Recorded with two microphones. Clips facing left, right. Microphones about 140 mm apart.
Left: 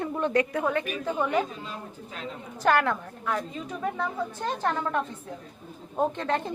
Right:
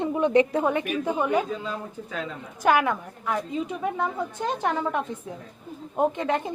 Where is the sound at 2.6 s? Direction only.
10° right (ahead or behind).